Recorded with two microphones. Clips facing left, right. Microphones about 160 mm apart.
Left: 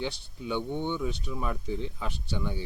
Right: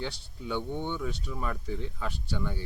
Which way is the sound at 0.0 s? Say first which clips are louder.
Left 2 dB; 20° left (ahead or behind).